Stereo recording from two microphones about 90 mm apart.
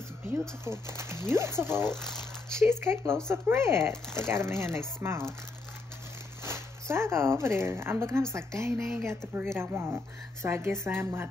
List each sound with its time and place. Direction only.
0.7 s speech: 30° right (ahead or behind)
2.0 s speech: 5° left (ahead or behind)
2.6 s speech: 25° right (ahead or behind)
6.4 s a woman's voice: 30° right (ahead or behind)